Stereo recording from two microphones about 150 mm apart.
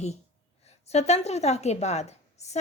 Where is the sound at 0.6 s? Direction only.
45° left (ahead or behind).